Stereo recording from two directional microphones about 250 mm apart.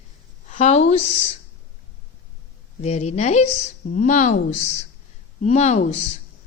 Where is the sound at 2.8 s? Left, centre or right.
Left.